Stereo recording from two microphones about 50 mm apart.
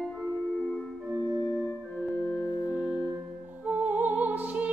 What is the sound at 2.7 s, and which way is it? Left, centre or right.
Music, right.